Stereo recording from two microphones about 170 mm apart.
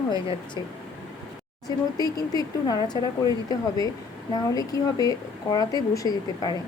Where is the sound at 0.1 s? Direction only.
25° left (ahead or behind).